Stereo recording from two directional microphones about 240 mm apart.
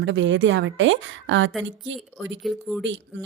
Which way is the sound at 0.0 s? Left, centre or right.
Right.